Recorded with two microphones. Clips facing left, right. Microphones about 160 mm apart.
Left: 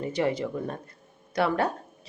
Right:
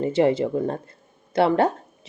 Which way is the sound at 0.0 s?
25° right (ahead or behind).